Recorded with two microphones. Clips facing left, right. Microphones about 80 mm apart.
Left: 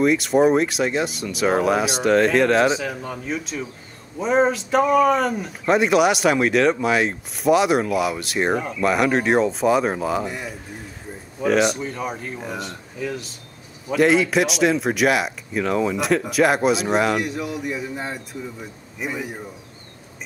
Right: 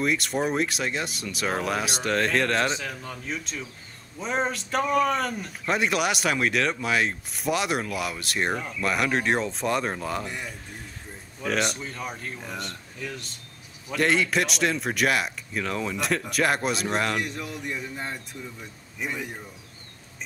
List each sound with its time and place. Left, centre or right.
0.0 s speech: centre